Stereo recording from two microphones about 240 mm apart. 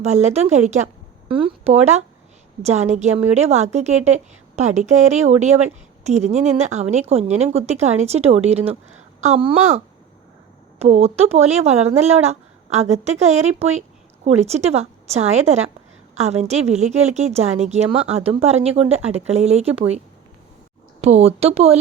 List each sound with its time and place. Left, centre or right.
0.0 s a woman's voice: right
21.0 s a woman's voice: right